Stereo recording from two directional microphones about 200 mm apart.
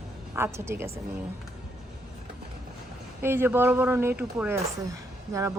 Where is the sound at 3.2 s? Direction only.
10° right (ahead or behind).